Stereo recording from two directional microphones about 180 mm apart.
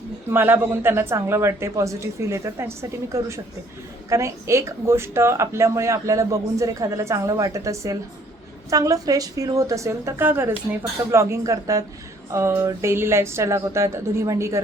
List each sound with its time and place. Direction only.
0.3 s speech: 10° right (ahead or behind)